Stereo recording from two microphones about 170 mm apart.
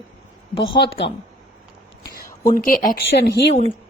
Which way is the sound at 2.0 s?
60° left (ahead or behind).